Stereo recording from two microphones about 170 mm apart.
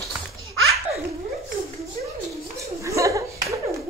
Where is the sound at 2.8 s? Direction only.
20° right (ahead or behind).